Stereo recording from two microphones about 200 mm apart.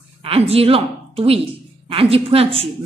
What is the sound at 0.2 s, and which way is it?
A woman's voice, 30° right (ahead or behind).